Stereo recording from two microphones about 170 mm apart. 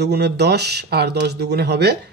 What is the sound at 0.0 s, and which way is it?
Speech, 75° right (ahead or behind).